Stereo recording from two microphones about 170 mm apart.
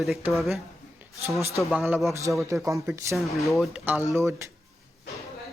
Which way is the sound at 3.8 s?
10° right (ahead or behind).